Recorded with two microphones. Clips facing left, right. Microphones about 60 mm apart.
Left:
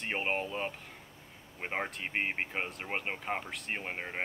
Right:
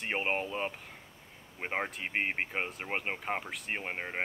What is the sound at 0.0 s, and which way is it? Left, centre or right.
Speech, centre.